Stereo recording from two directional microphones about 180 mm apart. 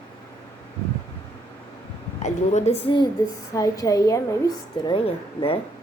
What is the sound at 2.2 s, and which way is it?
Speech, 40° left (ahead or behind).